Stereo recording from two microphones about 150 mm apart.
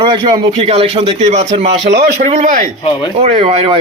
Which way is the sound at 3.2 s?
45° right (ahead or behind).